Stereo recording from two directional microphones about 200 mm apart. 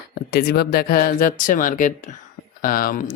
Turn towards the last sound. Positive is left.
turn(degrees=45)  # may be behind; listen again after turning